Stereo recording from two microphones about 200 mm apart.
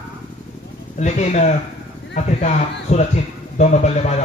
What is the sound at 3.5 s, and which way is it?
Speech, 35° left (ahead or behind).